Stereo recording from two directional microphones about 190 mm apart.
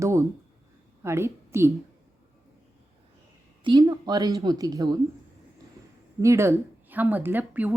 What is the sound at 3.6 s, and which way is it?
Speech, 20° right (ahead or behind).